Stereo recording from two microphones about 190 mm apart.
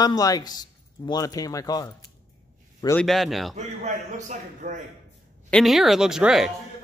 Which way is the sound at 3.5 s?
40° right (ahead or behind).